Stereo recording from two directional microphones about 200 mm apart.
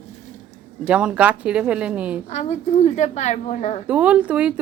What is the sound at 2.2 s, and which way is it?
A woman's voice, 35° left (ahead or behind).